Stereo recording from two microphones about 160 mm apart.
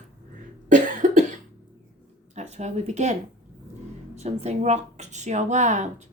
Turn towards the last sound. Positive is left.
turn(degrees=-50)  # may be behind; listen again after turning